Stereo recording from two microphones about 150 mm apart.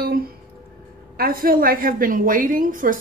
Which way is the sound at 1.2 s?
75° right (ahead or behind).